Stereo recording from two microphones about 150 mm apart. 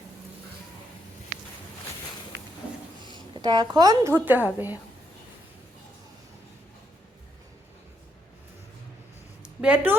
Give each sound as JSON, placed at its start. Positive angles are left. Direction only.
{"t": 3.3, "sound": "a woman's voice", "side_deg": -30}
{"t": 4.1, "sound": "a woman's voice", "side_deg": -10}
{"t": 9.4, "sound": "a sound", "side_deg": -5}